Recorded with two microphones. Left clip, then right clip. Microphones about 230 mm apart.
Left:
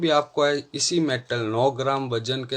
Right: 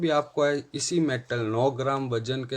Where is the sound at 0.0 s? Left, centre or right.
Left.